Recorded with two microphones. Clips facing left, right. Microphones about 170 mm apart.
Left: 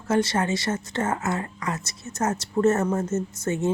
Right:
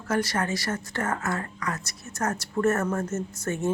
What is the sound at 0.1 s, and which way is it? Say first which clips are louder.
Speech: left 4 dB; 25° left (ahead or behind).